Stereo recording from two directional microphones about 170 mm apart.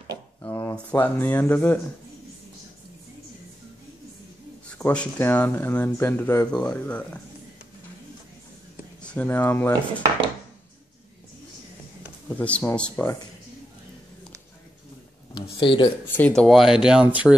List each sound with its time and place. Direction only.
0.4 s speech: 15° left (ahead or behind)
4.6 s speech: 5° left (ahead or behind)
9.0 s speech: 10° left (ahead or behind)
12.3 s speech: 10° left (ahead or behind)
15.3 s a sound: 30° left (ahead or behind)
16.2 s speech: 5° left (ahead or behind)